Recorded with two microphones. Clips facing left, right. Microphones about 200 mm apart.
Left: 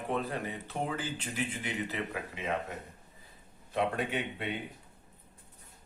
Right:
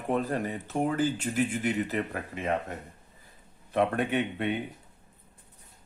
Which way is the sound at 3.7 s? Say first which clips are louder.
Right 5 dB; 55° right (ahead or behind).